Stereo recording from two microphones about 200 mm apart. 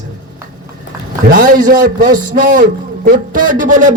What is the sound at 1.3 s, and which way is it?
A man's voice, 45° right (ahead or behind).